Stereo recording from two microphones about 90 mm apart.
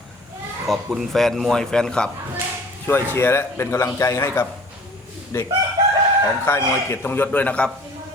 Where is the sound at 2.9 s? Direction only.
25° left (ahead or behind).